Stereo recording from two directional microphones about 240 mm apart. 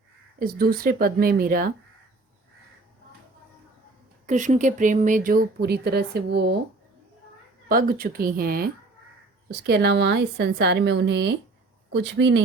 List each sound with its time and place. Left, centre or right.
0.3 s speech: right
4.3 s speech: right
7.7 s a woman's voice: right